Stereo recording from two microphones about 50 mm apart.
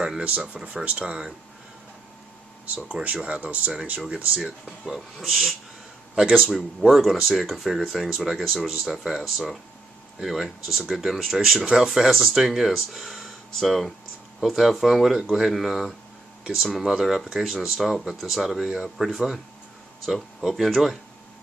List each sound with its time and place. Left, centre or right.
0.2 s speech: right
2.6 s speech: right
4.5 s speech: centre